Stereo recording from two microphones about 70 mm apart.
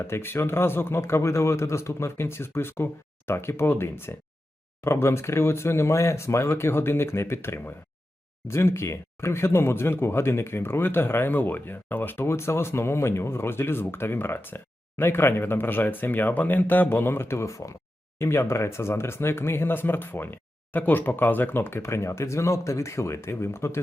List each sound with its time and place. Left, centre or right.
0.1 s speech: left